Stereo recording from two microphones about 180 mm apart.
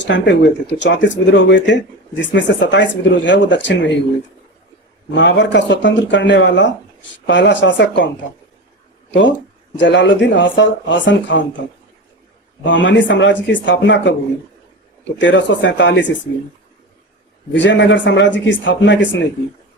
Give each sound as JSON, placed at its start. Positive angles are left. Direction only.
{"t": 0.0, "sound": "speech", "side_deg": 85}
{"t": 5.1, "sound": "speech", "side_deg": 85}
{"t": 9.7, "sound": "speech", "side_deg": 90}
{"t": 12.6, "sound": "speech", "side_deg": 90}
{"t": 15.2, "sound": "speech", "side_deg": 90}
{"t": 17.5, "sound": "speech", "side_deg": 90}